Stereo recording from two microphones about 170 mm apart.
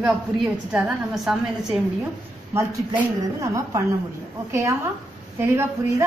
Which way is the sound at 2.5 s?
15° right (ahead or behind).